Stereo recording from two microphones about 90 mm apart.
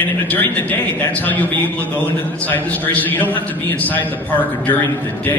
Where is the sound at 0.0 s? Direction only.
20° left (ahead or behind).